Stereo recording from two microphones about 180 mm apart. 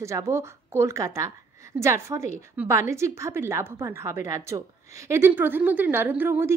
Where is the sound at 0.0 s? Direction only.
15° right (ahead or behind).